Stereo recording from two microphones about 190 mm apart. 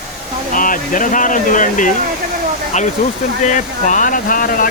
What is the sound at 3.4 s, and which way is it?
Speech, 40° left (ahead or behind).